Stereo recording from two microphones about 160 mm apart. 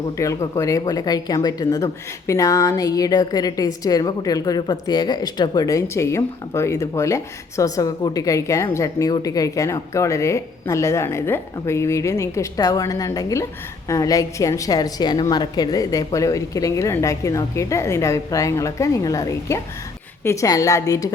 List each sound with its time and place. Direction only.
0.2 s a woman's voice: 20° left (ahead or behind)